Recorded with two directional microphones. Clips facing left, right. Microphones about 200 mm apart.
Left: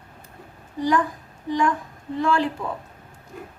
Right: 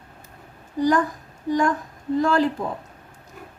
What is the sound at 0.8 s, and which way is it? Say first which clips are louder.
Speech: right 2 dB; 45° right (ahead or behind).